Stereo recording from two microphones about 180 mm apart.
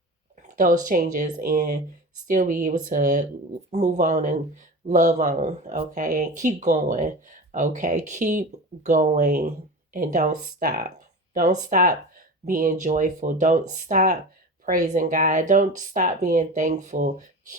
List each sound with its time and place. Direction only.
0.4 s speech: 45° right (ahead or behind)